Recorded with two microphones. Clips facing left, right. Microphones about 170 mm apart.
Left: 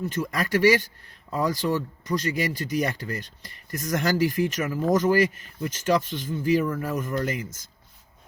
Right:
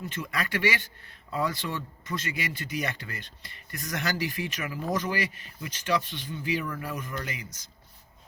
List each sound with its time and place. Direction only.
0.0 s speech: 40° left (ahead or behind)